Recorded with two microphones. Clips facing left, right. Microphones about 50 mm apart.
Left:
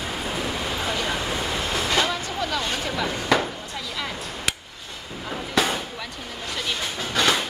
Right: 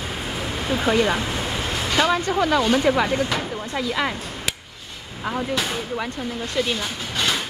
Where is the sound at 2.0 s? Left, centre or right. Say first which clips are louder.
Right 7 dB; right.